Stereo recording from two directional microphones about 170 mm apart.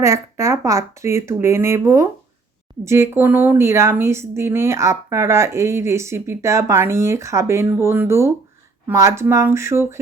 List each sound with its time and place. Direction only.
0.0 s a woman's voice: 20° right (ahead or behind)